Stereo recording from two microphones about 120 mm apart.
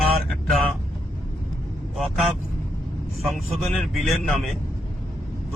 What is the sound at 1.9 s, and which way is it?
Speech, centre (ahead or behind).